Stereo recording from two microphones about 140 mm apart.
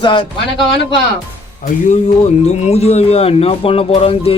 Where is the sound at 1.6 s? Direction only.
60° left (ahead or behind).